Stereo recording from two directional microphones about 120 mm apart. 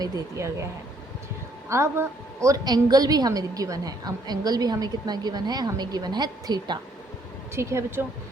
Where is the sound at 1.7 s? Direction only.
25° right (ahead or behind).